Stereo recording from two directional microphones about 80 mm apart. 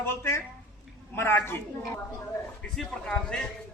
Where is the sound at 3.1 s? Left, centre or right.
Centre.